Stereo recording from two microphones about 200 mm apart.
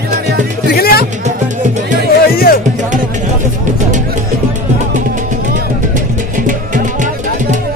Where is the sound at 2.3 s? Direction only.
50° left (ahead or behind).